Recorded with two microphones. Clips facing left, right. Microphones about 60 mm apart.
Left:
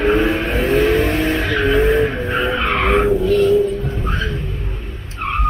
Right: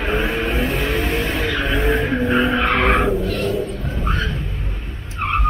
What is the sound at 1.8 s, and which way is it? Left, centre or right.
Vehicle, centre.